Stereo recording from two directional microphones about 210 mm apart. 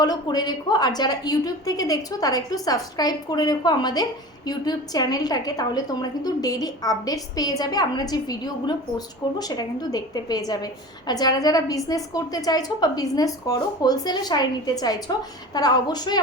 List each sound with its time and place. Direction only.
0.0 s a woman's voice: 20° left (ahead or behind)